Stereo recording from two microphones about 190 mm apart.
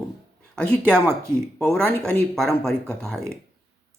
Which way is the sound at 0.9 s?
15° right (ahead or behind).